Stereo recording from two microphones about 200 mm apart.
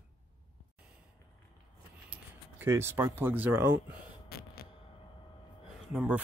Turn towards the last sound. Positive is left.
turn(degrees=-5)  # may be behind; listen again after turning